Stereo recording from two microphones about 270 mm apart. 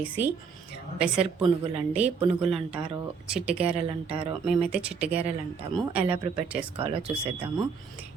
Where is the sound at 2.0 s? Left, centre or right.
Right.